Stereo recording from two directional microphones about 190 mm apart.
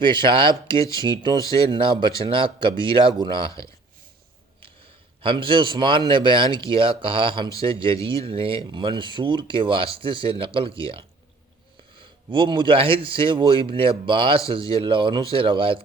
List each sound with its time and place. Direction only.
0.0 s speech: 25° right (ahead or behind)
5.2 s speech: 25° right (ahead or behind)